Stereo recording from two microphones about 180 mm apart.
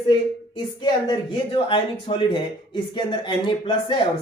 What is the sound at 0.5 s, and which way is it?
Speech, 25° left (ahead or behind).